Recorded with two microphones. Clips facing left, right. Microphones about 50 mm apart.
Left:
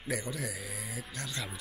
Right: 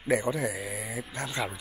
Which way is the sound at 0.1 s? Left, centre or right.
Right.